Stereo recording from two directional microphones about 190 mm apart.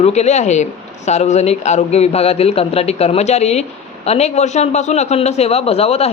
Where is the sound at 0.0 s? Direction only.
35° left (ahead or behind).